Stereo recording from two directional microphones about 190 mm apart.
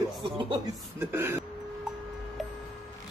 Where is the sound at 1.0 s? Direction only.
10° right (ahead or behind).